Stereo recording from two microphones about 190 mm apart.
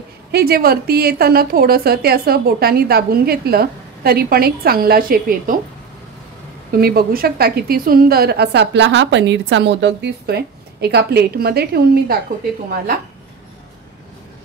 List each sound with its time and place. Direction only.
0.3 s a woman's voice: 55° right (ahead or behind)
6.7 s a woman's voice: 55° right (ahead or behind)